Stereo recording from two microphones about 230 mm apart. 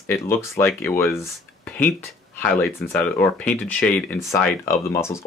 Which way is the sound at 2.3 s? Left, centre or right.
Centre.